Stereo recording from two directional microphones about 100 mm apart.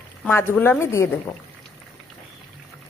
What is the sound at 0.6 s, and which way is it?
Speech, 25° left (ahead or behind).